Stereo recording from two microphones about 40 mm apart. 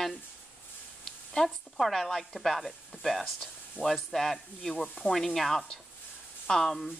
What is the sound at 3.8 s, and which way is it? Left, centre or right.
Speech, centre.